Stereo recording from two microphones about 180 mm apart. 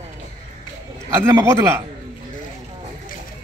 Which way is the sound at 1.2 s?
15° right (ahead or behind).